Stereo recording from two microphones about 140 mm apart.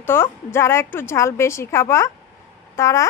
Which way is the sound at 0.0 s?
15° left (ahead or behind).